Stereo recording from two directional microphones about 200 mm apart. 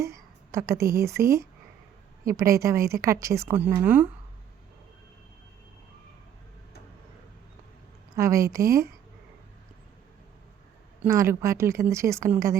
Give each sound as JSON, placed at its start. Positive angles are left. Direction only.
{"t": 0.0, "sound": "a woman's voice", "side_deg": -15}
{"t": 8.1, "sound": "a woman's voice", "side_deg": -15}
{"t": 11.0, "sound": "a woman's voice", "side_deg": -15}